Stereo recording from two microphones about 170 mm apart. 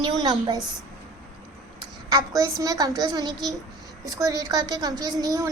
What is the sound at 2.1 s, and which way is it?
A woman's voice, 20° right (ahead or behind).